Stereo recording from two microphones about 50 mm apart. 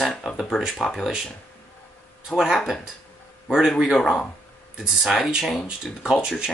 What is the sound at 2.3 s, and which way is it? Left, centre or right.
Speech, centre.